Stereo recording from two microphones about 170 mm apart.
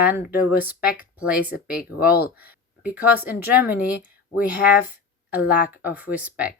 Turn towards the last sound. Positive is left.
turn(degrees=-10)  # may be behind; listen again after turning